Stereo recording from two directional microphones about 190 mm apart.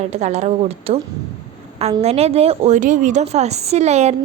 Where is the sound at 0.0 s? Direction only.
35° right (ahead or behind).